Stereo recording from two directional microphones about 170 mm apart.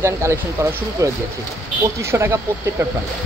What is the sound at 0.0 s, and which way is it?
Speech, 15° right (ahead or behind).